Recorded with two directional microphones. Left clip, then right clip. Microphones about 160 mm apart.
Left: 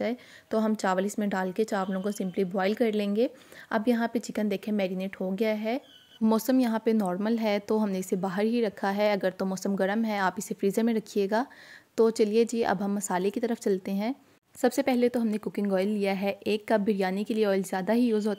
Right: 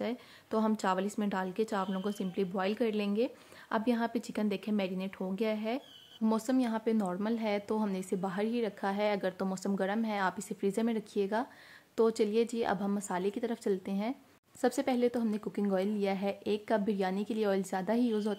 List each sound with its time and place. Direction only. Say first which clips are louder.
0.0 s a woman's voice: left 6 dB; 25° left (ahead or behind)